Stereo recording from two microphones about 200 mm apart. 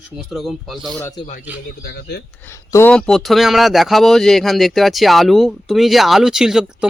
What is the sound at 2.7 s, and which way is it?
Speech, 10° left (ahead or behind).